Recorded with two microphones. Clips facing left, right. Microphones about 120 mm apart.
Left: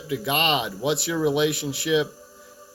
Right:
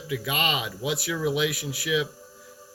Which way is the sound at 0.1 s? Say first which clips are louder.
Left 4 dB; 25° left (ahead or behind).